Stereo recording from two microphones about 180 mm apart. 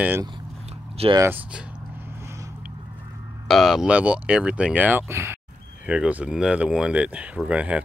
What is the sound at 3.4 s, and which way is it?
Speech, centre (ahead or behind).